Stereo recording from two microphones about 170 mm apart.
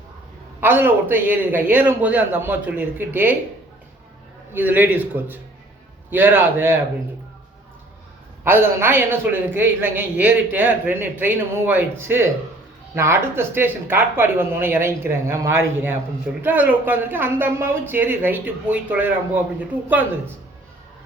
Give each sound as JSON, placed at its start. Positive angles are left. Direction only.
{"t": 0.6, "sound": "speech", "side_deg": -10}
{"t": 4.5, "sound": "speech", "side_deg": -10}
{"t": 8.4, "sound": "speech", "side_deg": -15}